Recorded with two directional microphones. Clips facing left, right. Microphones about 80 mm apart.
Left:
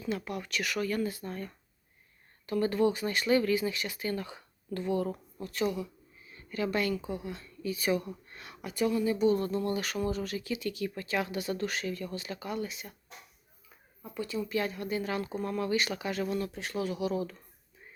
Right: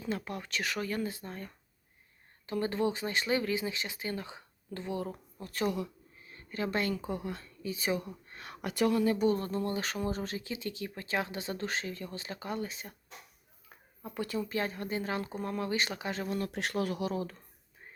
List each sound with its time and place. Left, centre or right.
0.0 s speech: right
2.5 s speech: right
5.4 s speech: right
5.7 s a sound: right
6.3 s a woman's voice: right
7.0 s speech: right
7.6 s speech: right
8.6 s speech: right
9.3 s speech: right
13.7 s a sound: right
14.5 s speech: right
16.5 s speech: right